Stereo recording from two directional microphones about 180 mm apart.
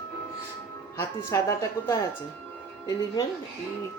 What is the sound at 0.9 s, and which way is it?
A woman's voice, 15° left (ahead or behind).